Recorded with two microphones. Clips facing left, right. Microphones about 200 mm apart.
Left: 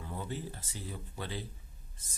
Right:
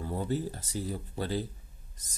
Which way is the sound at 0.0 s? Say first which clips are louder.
Right 8 dB; 35° right (ahead or behind).